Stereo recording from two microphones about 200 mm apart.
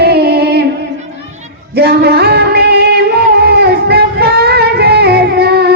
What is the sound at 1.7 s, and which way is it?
Music, 55° right (ahead or behind).